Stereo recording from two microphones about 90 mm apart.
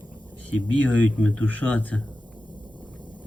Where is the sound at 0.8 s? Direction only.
15° left (ahead or behind).